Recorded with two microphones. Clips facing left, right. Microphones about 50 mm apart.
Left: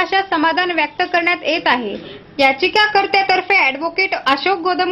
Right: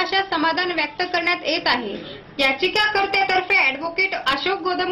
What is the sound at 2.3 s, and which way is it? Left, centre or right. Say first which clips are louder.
A woman's voice: left 6 dB; left.